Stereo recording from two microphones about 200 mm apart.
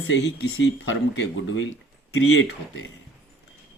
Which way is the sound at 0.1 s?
65° left (ahead or behind).